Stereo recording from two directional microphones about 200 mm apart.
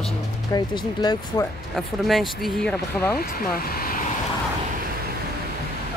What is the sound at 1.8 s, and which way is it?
Speech, centre (ahead or behind).